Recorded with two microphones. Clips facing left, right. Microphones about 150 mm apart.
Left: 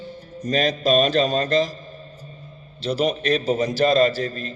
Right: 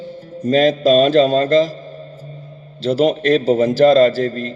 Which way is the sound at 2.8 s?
90° right.